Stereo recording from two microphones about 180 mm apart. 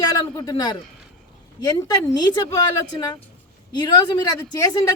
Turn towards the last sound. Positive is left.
turn(degrees=20)  # may be behind; listen again after turning